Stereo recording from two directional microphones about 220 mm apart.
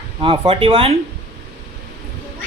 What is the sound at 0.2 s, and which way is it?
Speech, 25° right (ahead or behind).